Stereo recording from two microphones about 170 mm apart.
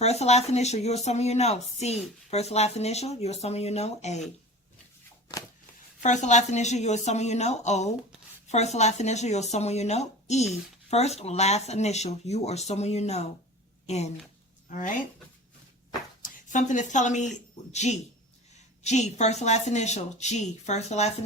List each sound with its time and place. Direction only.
0.0 s speech: 40° left (ahead or behind)
6.0 s a woman's voice: 45° left (ahead or behind)
16.2 s speech: 45° left (ahead or behind)